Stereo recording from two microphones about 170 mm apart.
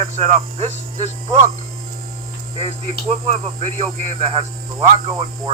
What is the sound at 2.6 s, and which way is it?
Speech, 35° right (ahead or behind).